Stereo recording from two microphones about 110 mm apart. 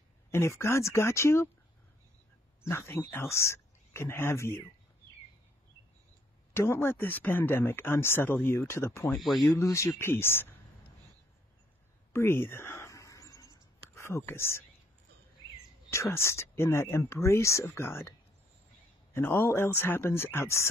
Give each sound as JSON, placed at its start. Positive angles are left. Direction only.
{"t": 0.3, "sound": "speech", "side_deg": 25}
{"t": 2.6, "sound": "speech", "side_deg": 25}
{"t": 6.5, "sound": "speech", "side_deg": 25}
{"t": 9.2, "sound": "speech", "side_deg": 0}
{"t": 9.5, "sound": "speech", "side_deg": 25}
{"t": 12.1, "sound": "a sound", "side_deg": 20}
{"t": 15.9, "sound": "speech", "side_deg": 25}
{"t": 19.1, "sound": "speech", "side_deg": 20}